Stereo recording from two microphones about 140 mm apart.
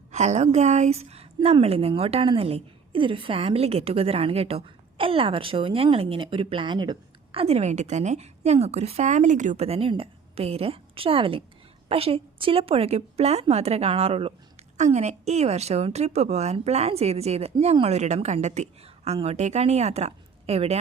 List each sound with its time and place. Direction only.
0.1 s a woman's voice: 55° right (ahead or behind); by 6.9 s 35° right (ahead or behind)
7.3 s a woman's voice: 45° right (ahead or behind)
14.8 s a woman's voice: 55° right (ahead or behind)